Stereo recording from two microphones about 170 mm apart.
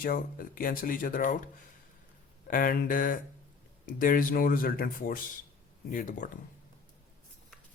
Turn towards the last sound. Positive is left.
turn(degrees=50)  # may be behind; listen again after turning